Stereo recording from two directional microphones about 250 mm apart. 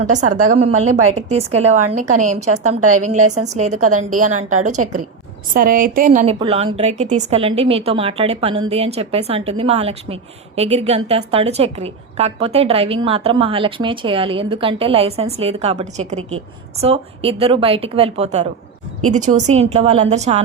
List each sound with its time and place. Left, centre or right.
0.1 s a woman's voice: right
6.4 s a woman's voice: right